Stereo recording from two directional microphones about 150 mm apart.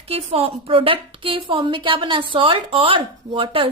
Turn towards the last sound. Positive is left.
turn(degrees=-35)  # may be behind; listen again after turning